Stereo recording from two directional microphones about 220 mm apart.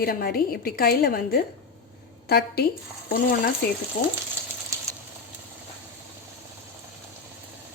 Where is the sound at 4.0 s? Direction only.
35° left (ahead or behind).